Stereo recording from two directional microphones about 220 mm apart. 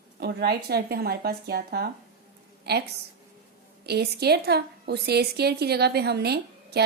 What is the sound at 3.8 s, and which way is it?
A woman's voice, 45° right (ahead or behind).